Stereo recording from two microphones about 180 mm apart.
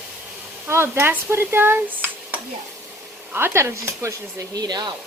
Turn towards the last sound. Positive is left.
turn(degrees=-25)  # may be behind; listen again after turning